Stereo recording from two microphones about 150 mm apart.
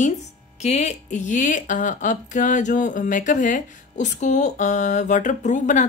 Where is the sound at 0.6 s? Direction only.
50° left (ahead or behind).